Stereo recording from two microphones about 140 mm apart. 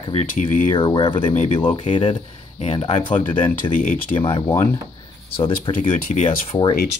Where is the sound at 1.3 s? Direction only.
55° left (ahead or behind).